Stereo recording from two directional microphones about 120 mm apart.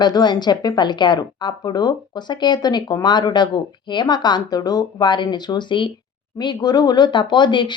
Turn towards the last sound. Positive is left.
turn(degrees=40)  # may be behind; listen again after turning